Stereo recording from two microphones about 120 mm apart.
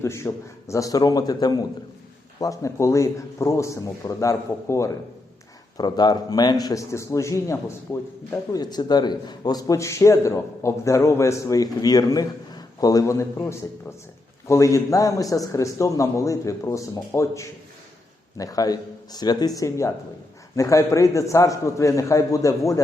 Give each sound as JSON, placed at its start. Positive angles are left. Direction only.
{"t": 0.0, "sound": "a man's voice", "side_deg": 20}
{"t": 8.5, "sound": "a man's voice", "side_deg": 35}